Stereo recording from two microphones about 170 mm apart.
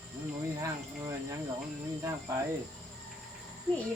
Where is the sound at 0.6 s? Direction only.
20° right (ahead or behind).